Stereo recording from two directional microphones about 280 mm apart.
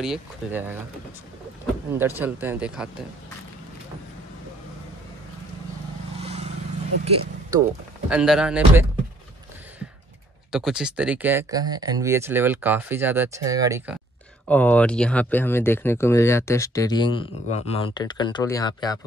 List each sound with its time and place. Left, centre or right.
0.0 s speech: centre
1.9 s speech: centre
6.1 s vehicle: right
8.1 s speech: centre
10.5 s speech: centre
14.5 s speech: centre